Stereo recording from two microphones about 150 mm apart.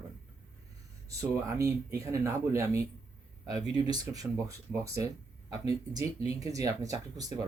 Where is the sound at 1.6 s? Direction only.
20° right (ahead or behind).